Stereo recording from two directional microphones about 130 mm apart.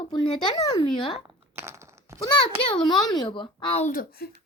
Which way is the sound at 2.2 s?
35° left (ahead or behind).